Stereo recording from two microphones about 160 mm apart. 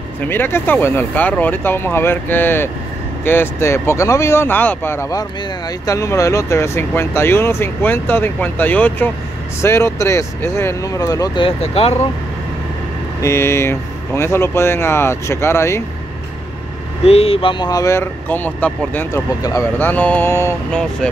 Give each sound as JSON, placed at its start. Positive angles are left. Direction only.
{"t": 0.2, "sound": "speech", "side_deg": 15}
{"t": 11.4, "sound": "speech", "side_deg": 40}
{"t": 13.2, "sound": "speech", "side_deg": 15}
{"t": 17.0, "sound": "speech", "side_deg": 40}